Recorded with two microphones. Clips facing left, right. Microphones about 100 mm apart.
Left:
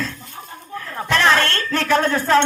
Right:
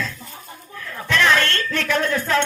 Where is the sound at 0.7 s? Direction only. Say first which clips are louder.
Left 2 dB; 40° left (ahead or behind).